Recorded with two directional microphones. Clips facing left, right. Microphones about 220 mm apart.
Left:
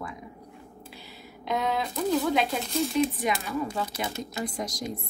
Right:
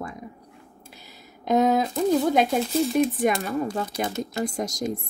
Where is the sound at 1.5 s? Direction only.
45° right (ahead or behind).